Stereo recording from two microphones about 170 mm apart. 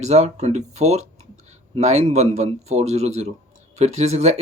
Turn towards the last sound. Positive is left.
turn(degrees=-40)  # may be behind; listen again after turning